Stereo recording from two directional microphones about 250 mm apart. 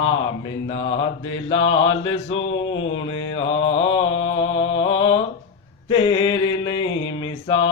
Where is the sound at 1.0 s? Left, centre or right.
Left.